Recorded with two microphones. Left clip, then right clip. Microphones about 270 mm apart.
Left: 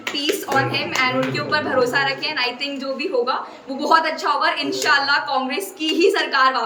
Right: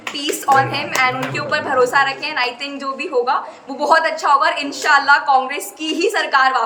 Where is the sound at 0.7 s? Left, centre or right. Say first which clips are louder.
Right 3 dB; centre.